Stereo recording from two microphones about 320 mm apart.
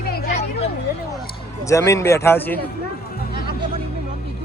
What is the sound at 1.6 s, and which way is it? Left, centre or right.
Speech, centre.